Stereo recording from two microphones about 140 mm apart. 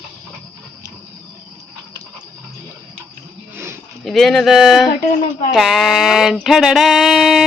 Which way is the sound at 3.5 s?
15° right (ahead or behind).